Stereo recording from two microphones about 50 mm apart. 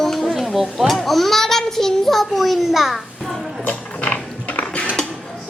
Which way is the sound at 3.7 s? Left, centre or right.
Left.